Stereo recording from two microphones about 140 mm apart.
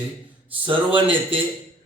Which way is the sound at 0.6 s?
35° right (ahead or behind).